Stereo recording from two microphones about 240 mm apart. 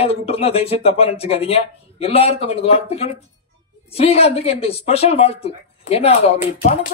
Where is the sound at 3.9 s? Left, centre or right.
Left.